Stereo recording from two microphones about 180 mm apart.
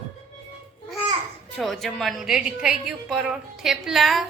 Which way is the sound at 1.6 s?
Centre (ahead or behind).